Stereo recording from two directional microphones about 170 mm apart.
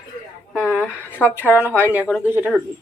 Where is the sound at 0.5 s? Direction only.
5° right (ahead or behind).